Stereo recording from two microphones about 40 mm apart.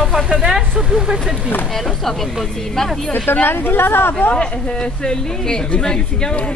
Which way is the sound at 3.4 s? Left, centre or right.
Left.